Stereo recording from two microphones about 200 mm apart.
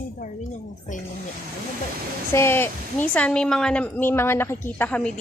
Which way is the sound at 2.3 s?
10° left (ahead or behind).